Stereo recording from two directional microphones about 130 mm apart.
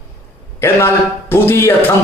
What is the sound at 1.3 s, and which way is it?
Speech, 20° left (ahead or behind).